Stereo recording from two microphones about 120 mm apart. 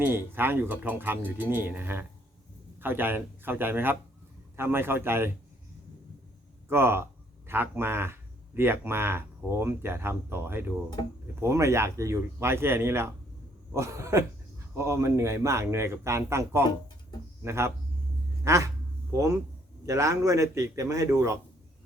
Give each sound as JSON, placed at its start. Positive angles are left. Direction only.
{"t": 0.0, "sound": "speech", "side_deg": -15}
{"t": 6.7, "sound": "speech", "side_deg": -20}